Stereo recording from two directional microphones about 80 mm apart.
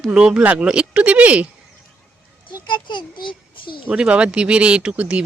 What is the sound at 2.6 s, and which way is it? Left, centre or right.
A child's voice, left.